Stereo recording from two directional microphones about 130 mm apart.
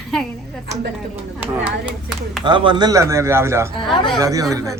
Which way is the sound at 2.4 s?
40° right (ahead or behind).